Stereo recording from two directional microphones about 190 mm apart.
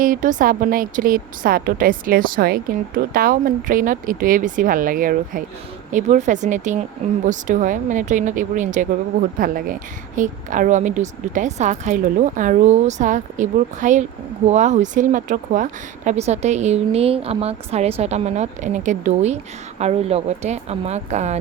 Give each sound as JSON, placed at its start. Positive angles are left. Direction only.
{"t": 0.0, "sound": "a woman's voice", "side_deg": -45}